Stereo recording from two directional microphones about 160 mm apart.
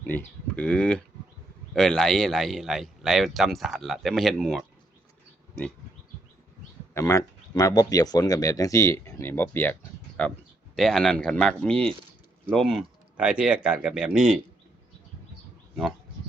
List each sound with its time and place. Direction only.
0.1 s speech: 10° left (ahead or behind)
6.9 s speech: 20° left (ahead or behind); by 14.3 s 5° right (ahead or behind)